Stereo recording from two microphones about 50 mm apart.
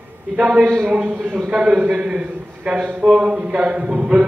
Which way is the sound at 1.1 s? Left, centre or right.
Right.